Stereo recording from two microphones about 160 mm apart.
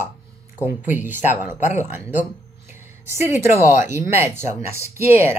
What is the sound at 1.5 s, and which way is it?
Speech, 50° left (ahead or behind).